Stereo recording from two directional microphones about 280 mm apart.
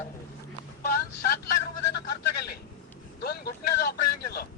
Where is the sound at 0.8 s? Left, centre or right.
Left.